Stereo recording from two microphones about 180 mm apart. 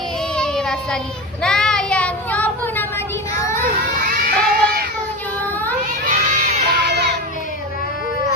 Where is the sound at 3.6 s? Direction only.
50° right (ahead or behind).